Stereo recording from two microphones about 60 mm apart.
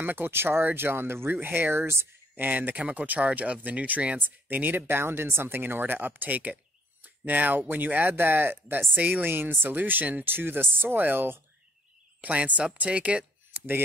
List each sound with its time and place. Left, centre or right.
0.0 s speech: right
2.3 s speech: right
12.2 s speech: right
13.5 s chopping: right